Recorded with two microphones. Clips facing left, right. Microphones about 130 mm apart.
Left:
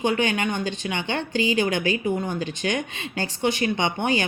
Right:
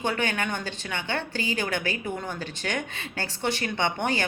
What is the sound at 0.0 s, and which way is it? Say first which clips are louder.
Speech: left 5 dB; 15° left (ahead or behind).